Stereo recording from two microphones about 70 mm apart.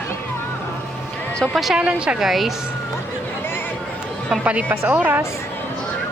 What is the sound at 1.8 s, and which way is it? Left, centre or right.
Speech, centre.